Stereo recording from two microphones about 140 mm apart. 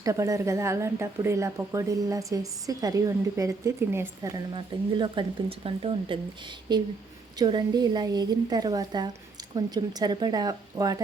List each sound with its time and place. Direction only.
0.0 s a woman's voice: 20° right (ahead or behind)
4.5 s a woman's voice: 35° right (ahead or behind)